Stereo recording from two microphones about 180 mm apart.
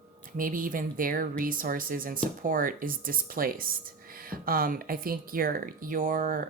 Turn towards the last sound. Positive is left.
turn(degrees=-50)  # may be behind; listen again after turning